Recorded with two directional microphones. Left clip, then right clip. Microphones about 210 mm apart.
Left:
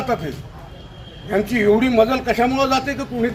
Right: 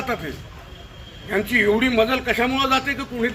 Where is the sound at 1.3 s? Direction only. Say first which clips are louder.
Left 2 dB; 30° left (ahead or behind).